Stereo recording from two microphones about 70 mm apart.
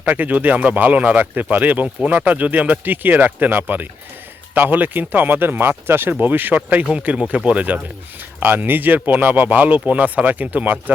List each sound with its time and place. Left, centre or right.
0.0 s speech: right